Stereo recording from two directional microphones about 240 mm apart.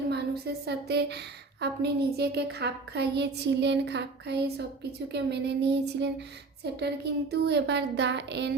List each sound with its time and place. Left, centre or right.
0.1 s a woman's voice: right